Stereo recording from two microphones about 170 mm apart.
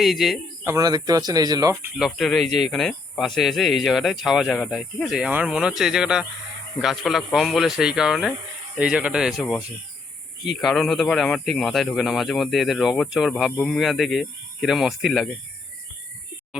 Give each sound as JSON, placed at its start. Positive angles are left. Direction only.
{"t": 0.0, "sound": "speech", "side_deg": 0}
{"t": 0.6, "sound": "speech", "side_deg": -20}
{"t": 2.0, "sound": "speech", "side_deg": 0}